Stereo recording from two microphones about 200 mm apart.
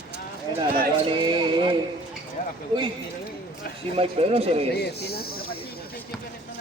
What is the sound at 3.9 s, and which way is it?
Speech, 30° right (ahead or behind).